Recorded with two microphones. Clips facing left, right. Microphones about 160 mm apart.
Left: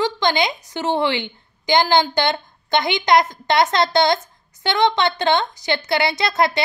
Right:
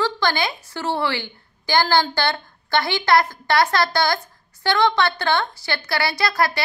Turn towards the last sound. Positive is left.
turn(degrees=20)  # may be behind; listen again after turning